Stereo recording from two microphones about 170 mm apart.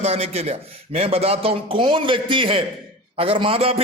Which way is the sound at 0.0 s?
35° right (ahead or behind).